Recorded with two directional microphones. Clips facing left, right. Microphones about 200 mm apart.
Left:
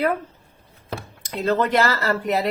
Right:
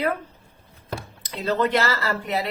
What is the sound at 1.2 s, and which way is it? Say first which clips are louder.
Speech: left 2 dB; 50° left (ahead or behind).